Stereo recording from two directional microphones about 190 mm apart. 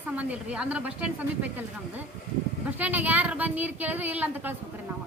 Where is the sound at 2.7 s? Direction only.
10° right (ahead or behind).